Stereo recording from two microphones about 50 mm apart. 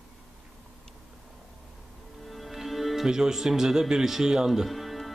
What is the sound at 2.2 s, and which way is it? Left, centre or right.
Speech, centre.